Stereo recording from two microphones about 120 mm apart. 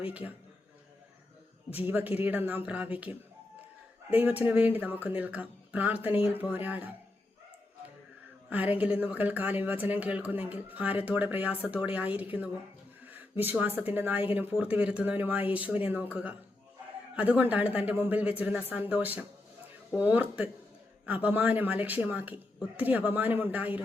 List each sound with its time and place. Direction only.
0.0 s speech: 10° right (ahead or behind)
1.9 s speech: 15° right (ahead or behind)
8.4 s speech: 15° right (ahead or behind)